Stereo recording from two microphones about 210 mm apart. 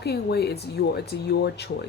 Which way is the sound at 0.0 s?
50° left (ahead or behind).